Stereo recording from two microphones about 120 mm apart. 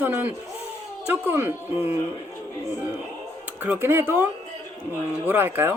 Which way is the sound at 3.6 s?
15° right (ahead or behind).